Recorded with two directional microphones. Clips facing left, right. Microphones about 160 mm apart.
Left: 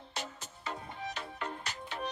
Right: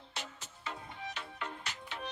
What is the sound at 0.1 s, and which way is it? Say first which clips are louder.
Music: left 4 dB; 40° left (ahead or behind).